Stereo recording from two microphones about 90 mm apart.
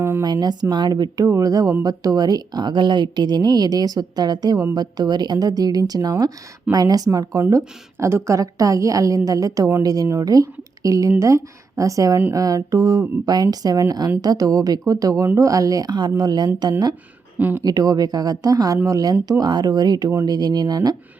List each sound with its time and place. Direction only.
0.2 s a woman's voice: 50° right (ahead or behind)
17.3 s speech: 20° right (ahead or behind)
17.6 s a woman's voice: 45° right (ahead or behind)